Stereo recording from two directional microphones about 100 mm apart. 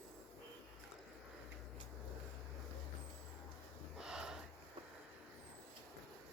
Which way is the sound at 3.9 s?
5° right (ahead or behind).